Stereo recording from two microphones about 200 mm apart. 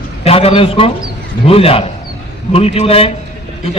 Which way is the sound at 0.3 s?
30° left (ahead or behind).